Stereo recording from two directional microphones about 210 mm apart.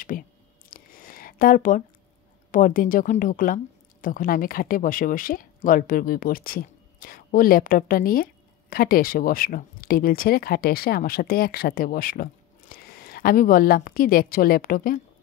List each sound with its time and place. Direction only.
0.1 s speech: 40° left (ahead or behind)
0.7 s a sound: 40° left (ahead or behind)
2.5 s a woman's voice: 40° left (ahead or behind)